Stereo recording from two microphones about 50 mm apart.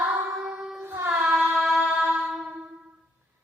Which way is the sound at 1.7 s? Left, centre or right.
Right.